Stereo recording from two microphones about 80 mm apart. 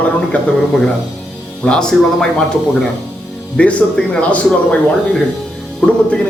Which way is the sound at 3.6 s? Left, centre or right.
Centre.